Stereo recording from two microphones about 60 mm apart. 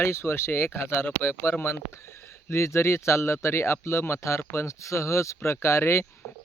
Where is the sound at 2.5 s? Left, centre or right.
Left.